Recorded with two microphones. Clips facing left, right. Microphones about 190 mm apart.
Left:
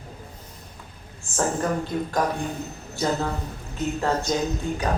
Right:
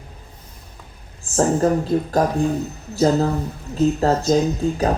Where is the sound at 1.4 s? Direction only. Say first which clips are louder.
Right 7 dB; 35° right (ahead or behind).